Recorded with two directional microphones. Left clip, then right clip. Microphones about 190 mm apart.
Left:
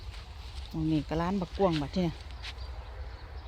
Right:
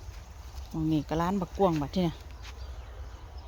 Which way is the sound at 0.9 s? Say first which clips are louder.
Right 2 dB; 15° right (ahead or behind).